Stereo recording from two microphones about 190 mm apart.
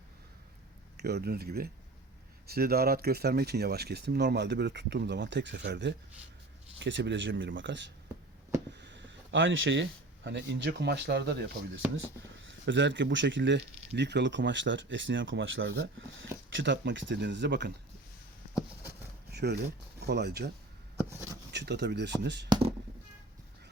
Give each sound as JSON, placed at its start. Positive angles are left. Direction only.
{"t": 0.9, "sound": "speech", "side_deg": -60}
{"t": 8.8, "sound": "a sound", "side_deg": -70}
{"t": 10.2, "sound": "speech", "side_deg": -70}
{"t": 12.5, "sound": "speech", "side_deg": -70}
{"t": 19.3, "sound": "speech", "side_deg": -60}
{"t": 21.5, "sound": "speech", "side_deg": -65}